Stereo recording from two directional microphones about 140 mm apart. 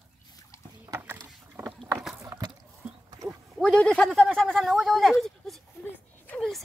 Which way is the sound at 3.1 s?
25° right (ahead or behind).